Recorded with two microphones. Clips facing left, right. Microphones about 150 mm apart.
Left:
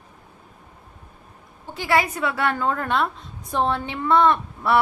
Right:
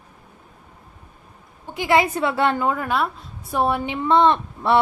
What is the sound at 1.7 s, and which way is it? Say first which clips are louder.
A woman's voice: right 3 dB; 20° right (ahead or behind).